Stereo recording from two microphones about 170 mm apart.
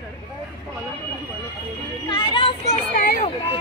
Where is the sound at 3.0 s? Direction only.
60° left (ahead or behind).